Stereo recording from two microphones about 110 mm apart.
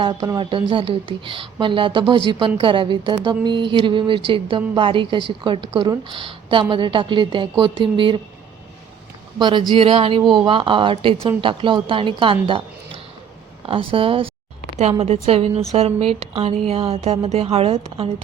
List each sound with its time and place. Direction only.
0.3 s speech: 50° right (ahead or behind)
9.4 s a woman's voice: 45° right (ahead or behind)
14.8 s a woman's voice: 70° right (ahead or behind)